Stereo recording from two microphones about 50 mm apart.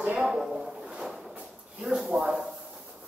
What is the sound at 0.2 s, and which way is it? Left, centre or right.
Speech, centre.